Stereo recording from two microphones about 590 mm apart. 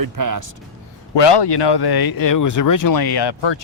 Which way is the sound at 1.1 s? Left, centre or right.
Left.